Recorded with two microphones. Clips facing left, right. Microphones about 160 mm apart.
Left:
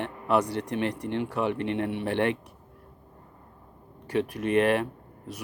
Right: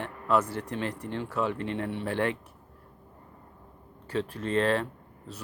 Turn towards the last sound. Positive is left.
turn(degrees=15)  # may be behind; listen again after turning